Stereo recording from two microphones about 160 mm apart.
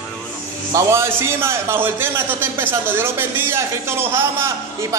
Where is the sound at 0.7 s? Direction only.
15° right (ahead or behind).